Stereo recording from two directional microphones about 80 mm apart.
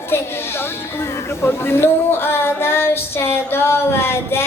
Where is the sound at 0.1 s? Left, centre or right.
Left.